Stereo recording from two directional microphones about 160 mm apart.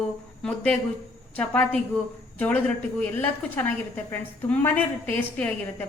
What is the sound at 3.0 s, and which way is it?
A woman's voice, 10° left (ahead or behind).